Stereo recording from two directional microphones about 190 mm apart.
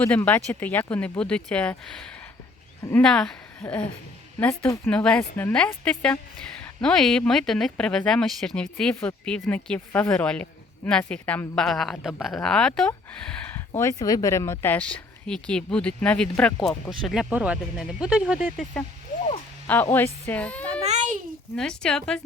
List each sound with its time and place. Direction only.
0.0 s speech: 10° left (ahead or behind)
19.6 s speech: 10° left (ahead or behind)
20.8 s babbling: 35° right (ahead or behind)
21.5 s speech: 5° left (ahead or behind)